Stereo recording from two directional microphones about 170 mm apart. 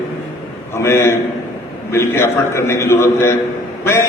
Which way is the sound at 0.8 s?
15° left (ahead or behind).